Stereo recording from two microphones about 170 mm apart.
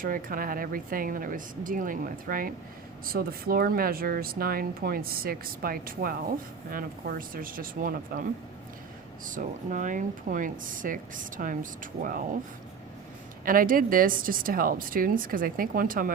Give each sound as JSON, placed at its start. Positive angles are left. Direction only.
{"t": 0.0, "sound": "speech", "side_deg": -55}
{"t": 13.4, "sound": "speech", "side_deg": -55}